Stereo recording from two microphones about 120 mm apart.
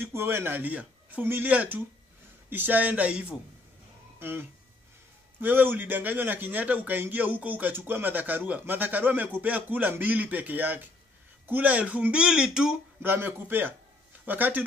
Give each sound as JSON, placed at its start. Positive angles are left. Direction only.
{"t": 0.0, "sound": "a man's voice", "side_deg": -20}
{"t": 13.0, "sound": "a man's voice", "side_deg": -15}